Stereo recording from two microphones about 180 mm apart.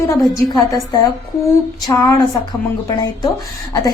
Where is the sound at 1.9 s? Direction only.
20° left (ahead or behind).